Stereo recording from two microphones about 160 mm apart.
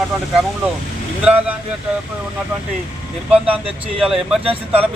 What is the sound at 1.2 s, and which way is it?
Speech, 10° right (ahead or behind).